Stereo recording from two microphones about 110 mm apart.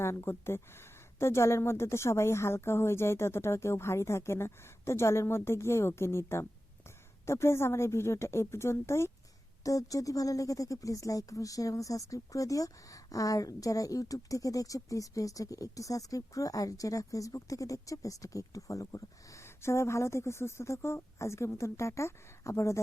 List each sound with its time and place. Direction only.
0.0 s speech: 25° left (ahead or behind)